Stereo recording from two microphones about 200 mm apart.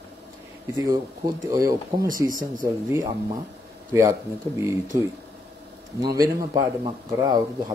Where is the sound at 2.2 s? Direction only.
45° right (ahead or behind).